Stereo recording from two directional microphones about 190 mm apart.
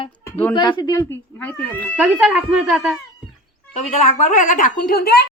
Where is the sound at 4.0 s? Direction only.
40° left (ahead or behind); by 5.3 s 55° left (ahead or behind).